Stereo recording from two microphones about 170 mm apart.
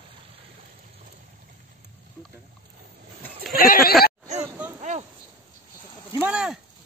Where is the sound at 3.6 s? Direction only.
60° left (ahead or behind).